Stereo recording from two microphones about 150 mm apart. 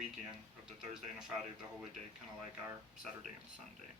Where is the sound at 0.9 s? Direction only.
20° right (ahead or behind).